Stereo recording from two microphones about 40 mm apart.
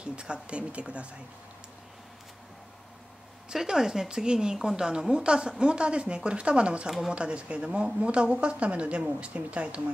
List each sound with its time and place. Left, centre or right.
0.0 s speech: right
3.4 s speech: centre; by 9.8 s right